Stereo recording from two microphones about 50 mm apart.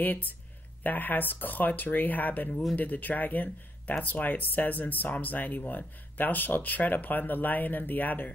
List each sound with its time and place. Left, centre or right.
0.0 s speech: left